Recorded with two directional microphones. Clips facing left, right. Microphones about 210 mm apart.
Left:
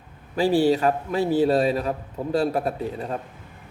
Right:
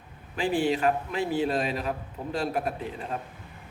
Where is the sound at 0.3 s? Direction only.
35° left (ahead or behind).